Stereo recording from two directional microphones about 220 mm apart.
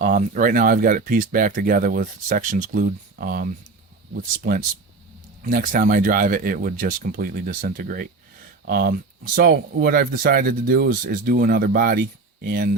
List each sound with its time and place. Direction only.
0.0 s speech: 35° right (ahead or behind)